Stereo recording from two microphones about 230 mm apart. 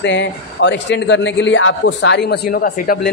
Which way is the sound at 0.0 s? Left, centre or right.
Left.